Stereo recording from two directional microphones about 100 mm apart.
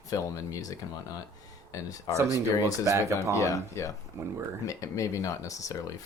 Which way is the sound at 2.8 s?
30° right (ahead or behind).